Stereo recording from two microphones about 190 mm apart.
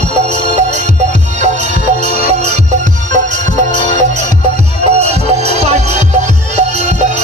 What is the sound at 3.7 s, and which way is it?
Music, 25° left (ahead or behind).